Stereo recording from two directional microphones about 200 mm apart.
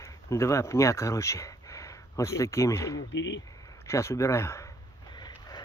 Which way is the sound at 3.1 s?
65° left (ahead or behind).